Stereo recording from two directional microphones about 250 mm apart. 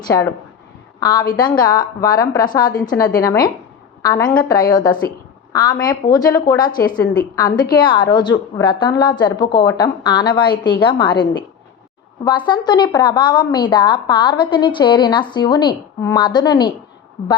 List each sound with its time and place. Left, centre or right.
0.1 s a woman's voice: centre